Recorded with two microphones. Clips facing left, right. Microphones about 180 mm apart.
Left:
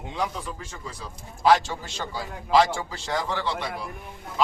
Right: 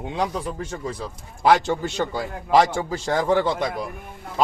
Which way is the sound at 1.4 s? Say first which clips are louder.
Right 2 dB; 55° right (ahead or behind).